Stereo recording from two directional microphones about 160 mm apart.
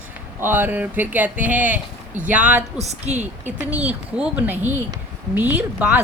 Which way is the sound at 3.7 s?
10° right (ahead or behind).